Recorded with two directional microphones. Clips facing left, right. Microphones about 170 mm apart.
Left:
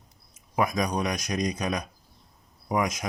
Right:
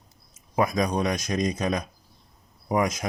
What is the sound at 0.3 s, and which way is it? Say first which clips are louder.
Speech: right 2 dB; 30° right (ahead or behind).